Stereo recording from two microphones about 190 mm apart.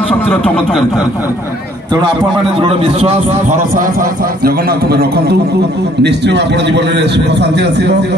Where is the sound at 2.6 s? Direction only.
30° right (ahead or behind).